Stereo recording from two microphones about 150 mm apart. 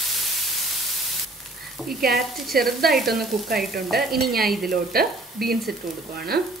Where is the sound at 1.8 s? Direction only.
Centre (ahead or behind).